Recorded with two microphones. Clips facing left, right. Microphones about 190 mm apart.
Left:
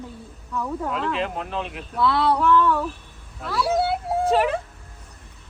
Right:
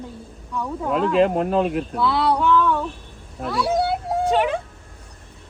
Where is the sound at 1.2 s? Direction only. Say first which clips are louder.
Right 10 dB; 45° right (ahead or behind).